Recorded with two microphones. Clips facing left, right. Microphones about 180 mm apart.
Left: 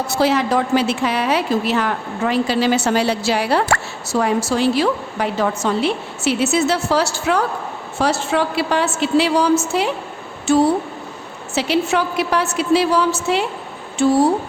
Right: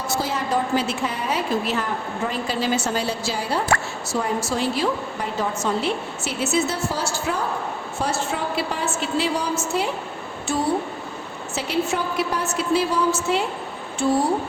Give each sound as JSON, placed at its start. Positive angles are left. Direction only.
{"t": 0.1, "sound": "a woman's voice", "side_deg": 75}
{"t": 4.2, "sound": "a woman's voice", "side_deg": 85}
{"t": 7.9, "sound": "a woman's voice", "side_deg": 85}
{"t": 11.5, "sound": "a woman's voice", "side_deg": 85}